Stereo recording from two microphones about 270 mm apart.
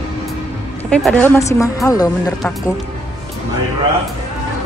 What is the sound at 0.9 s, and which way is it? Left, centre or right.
A woman's voice, centre.